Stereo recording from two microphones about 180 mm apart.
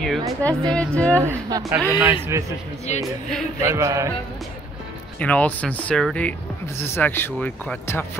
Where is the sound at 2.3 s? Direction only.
15° right (ahead or behind).